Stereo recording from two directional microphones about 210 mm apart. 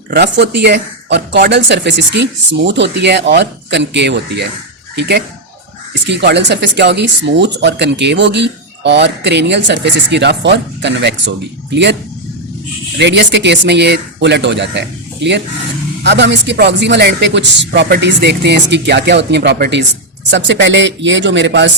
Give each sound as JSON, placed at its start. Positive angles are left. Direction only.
{"t": 0.1, "sound": "speech", "side_deg": -50}
{"t": 13.0, "sound": "speech", "side_deg": -55}